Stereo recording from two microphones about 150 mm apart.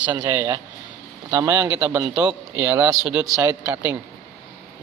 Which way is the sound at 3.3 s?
20° right (ahead or behind).